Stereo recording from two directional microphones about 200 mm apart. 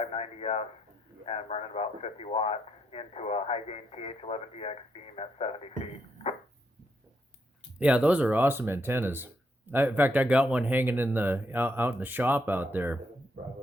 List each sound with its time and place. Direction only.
0.0 s speech: 30° left (ahead or behind)
7.8 s speech: 5° right (ahead or behind)